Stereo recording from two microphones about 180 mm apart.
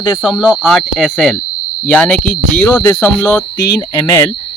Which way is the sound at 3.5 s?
20° left (ahead or behind).